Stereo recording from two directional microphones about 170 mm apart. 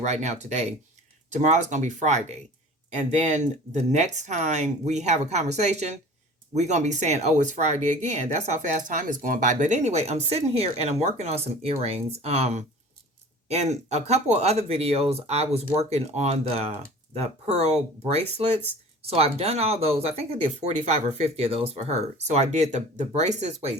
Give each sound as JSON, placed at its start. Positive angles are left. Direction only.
{"t": 0.0, "sound": "speech", "side_deg": -40}